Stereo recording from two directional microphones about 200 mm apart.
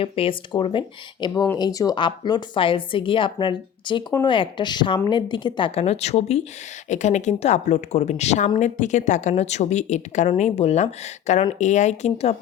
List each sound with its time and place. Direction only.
0.0 s a woman's voice: 25° left (ahead or behind)